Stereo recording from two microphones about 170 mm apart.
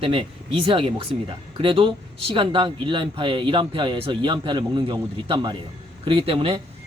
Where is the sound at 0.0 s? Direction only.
30° right (ahead or behind).